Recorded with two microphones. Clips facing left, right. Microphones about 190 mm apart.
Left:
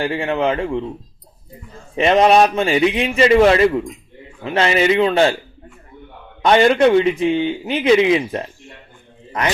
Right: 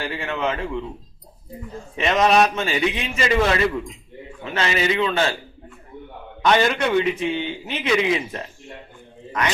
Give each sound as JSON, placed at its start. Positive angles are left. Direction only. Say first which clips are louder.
{"t": 0.0, "sound": "a man's voice", "louder": "left 7 dB", "side_deg": 35}
{"t": 2.0, "sound": "a man's voice", "louder": "left 5 dB", "side_deg": 30}
{"t": 6.4, "sound": "a man's voice", "louder": "left 7 dB", "side_deg": 30}